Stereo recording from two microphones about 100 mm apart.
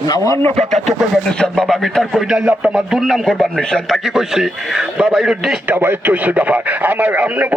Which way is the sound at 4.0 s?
5° right (ahead or behind).